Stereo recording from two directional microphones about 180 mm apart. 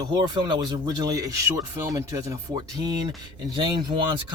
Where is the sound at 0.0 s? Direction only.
25° right (ahead or behind).